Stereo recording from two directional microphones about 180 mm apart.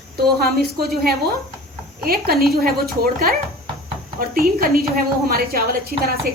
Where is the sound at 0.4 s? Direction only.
55° right (ahead or behind).